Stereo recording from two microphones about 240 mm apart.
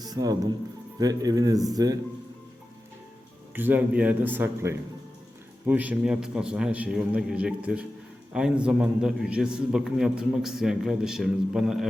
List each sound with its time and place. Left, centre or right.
0.0 s a man's voice: centre
3.5 s a man's voice: centre